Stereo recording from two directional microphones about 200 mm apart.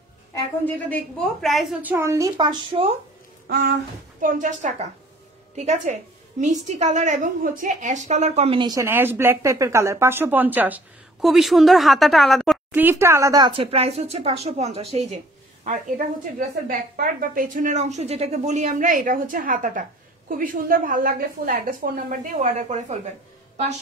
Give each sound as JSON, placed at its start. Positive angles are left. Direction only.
{"t": 0.3, "sound": "a woman's voice", "side_deg": 10}
{"t": 3.4, "sound": "a sound", "side_deg": -55}
{"t": 4.2, "sound": "a woman's voice", "side_deg": -40}
{"t": 12.7, "sound": "a woman's voice", "side_deg": -10}